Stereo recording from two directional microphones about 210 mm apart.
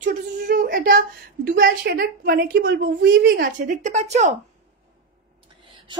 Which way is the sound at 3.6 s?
35° right (ahead or behind).